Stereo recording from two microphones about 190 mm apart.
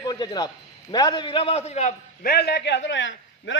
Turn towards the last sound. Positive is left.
turn(degrees=75)  # may be behind; listen again after turning